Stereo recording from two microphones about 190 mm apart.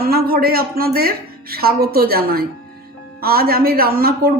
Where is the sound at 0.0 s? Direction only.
55° right (ahead or behind).